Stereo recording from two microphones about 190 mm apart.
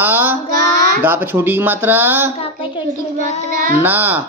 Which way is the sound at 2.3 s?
30° left (ahead or behind).